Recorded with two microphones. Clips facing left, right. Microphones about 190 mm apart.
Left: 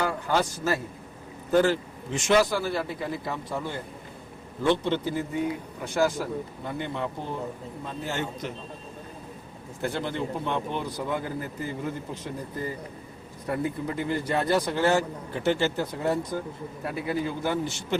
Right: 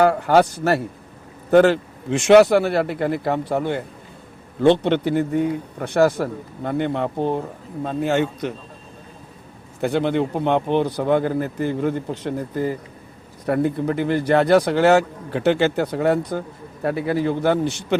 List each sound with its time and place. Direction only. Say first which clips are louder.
0.0 s speech: right 10 dB; 65° right (ahead or behind)
9.8 s speech: right 10 dB; 65° right (ahead or behind)